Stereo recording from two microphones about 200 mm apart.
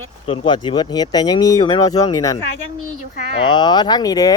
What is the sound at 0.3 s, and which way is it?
Speech, 25° left (ahead or behind).